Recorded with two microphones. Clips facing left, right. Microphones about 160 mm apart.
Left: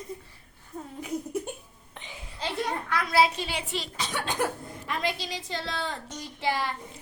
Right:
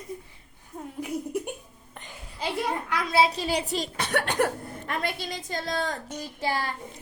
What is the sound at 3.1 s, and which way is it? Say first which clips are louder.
Speech: right 1 dB; 30° right (ahead or behind).